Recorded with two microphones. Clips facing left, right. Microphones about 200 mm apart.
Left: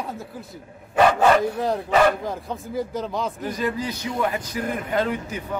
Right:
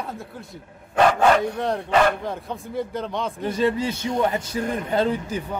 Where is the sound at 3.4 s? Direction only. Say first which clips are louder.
Right 8 dB; 30° right (ahead or behind).